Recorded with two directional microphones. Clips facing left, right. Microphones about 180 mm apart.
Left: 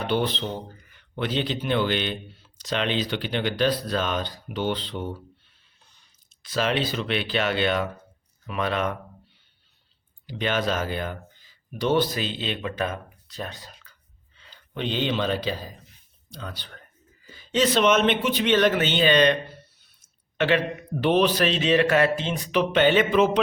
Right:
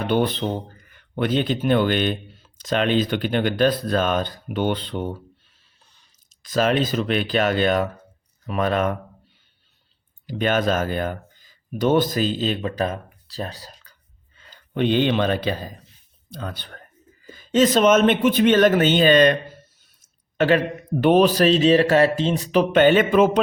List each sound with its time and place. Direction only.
0.1 s speech: 50° right (ahead or behind)
6.4 s speech: 45° right (ahead or behind)
10.2 s speech: 45° right (ahead or behind)